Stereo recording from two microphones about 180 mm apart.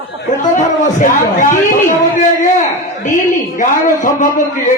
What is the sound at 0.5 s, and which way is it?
A man's voice, 45° left (ahead or behind).